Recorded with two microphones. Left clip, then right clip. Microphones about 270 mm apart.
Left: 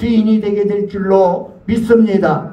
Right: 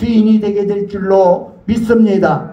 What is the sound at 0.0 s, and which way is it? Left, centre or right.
Speech, right.